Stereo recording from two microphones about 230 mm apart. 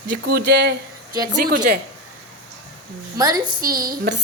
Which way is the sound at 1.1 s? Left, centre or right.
Centre.